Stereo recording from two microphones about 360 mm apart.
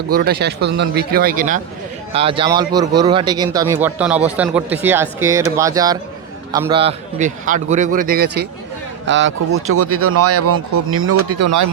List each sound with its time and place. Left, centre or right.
0.1 s a man's voice: right